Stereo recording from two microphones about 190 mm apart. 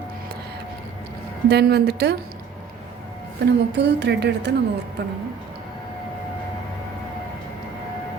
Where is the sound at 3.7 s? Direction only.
65° right (ahead or behind).